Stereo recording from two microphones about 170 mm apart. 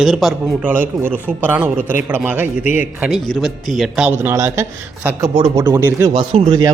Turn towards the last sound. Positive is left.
turn(degrees=-30)  # may be behind; listen again after turning